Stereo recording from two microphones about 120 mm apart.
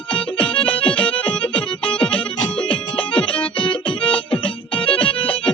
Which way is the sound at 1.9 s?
45° left (ahead or behind).